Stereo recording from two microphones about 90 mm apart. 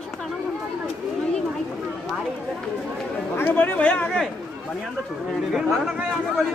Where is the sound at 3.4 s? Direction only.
20° left (ahead or behind).